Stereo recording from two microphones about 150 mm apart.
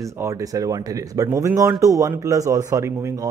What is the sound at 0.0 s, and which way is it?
Speech, 20° right (ahead or behind).